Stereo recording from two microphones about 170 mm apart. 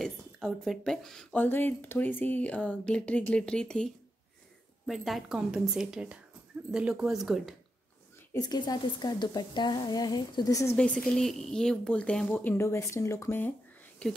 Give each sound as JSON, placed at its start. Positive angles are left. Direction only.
{"t": 0.0, "sound": "a woman's voice", "side_deg": 0}
{"t": 8.3, "sound": "a woman's voice", "side_deg": 25}
{"t": 10.8, "sound": "speech", "side_deg": 5}